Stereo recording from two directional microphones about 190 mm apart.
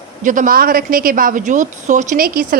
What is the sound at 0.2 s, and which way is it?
A woman's voice, 45° right (ahead or behind).